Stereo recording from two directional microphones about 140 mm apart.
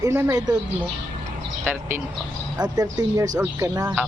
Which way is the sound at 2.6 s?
30° right (ahead or behind).